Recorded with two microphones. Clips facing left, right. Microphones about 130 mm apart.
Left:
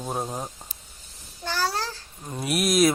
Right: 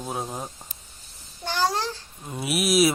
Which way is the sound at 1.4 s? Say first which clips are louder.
Right 2 dB; 20° right (ahead or behind).